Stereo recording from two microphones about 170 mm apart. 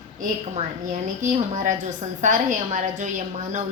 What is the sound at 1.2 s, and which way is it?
A woman's voice, 45° right (ahead or behind).